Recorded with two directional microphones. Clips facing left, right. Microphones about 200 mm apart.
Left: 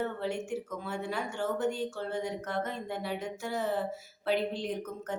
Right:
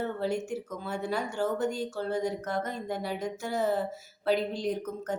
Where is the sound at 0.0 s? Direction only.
40° right (ahead or behind).